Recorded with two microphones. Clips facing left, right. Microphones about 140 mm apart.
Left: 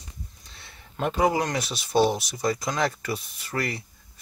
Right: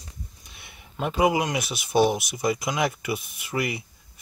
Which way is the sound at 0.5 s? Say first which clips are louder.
Even; 15° right (ahead or behind).